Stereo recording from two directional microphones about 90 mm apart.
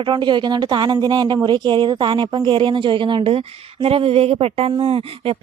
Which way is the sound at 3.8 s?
90° right.